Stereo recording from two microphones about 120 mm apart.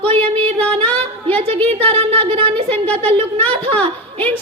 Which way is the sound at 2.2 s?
50° right (ahead or behind).